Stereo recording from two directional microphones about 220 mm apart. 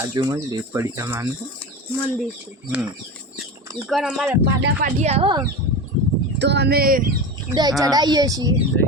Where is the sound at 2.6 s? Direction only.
15° right (ahead or behind).